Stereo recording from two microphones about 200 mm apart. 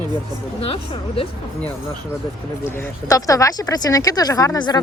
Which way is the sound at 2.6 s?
10° left (ahead or behind).